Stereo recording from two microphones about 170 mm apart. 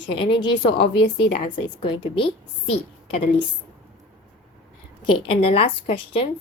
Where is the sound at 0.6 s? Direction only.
30° left (ahead or behind).